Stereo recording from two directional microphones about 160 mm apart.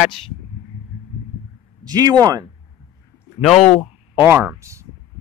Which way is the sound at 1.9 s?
25° right (ahead or behind).